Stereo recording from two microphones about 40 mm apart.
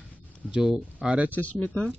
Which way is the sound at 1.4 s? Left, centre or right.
Left.